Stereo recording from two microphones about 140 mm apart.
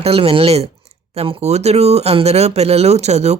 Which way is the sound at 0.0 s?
45° right (ahead or behind).